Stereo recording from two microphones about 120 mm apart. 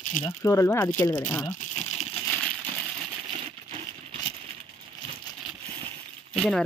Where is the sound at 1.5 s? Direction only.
65° left (ahead or behind).